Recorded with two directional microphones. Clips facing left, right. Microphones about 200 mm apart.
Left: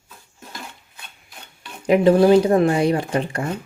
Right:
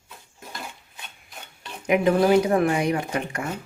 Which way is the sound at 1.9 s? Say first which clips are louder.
Left 5 dB; 30° left (ahead or behind).